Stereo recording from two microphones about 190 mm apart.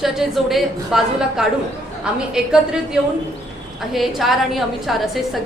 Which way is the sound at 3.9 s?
Centre (ahead or behind).